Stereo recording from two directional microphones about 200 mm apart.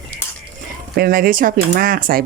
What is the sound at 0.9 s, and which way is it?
Speech, 50° right (ahead or behind).